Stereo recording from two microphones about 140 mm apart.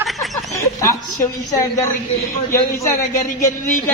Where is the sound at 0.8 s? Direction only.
25° left (ahead or behind).